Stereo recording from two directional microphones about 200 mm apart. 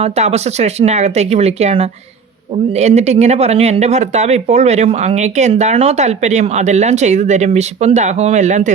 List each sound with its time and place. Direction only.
0.0 s speech: 30° right (ahead or behind)